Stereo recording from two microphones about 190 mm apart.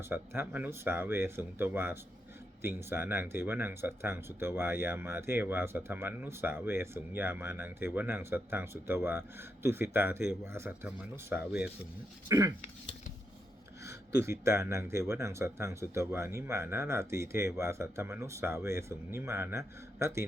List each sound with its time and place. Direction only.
0.1 s speech: 10° right (ahead or behind)
13.8 s speech: 15° right (ahead or behind)